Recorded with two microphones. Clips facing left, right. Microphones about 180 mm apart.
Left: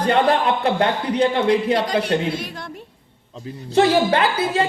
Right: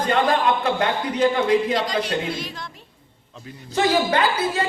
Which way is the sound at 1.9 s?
60° left (ahead or behind).